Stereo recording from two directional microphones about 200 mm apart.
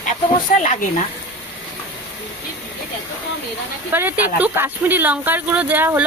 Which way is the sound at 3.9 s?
10° right (ahead or behind).